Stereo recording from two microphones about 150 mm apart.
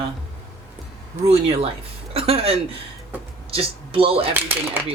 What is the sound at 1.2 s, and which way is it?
Speech, 40° right (ahead or behind).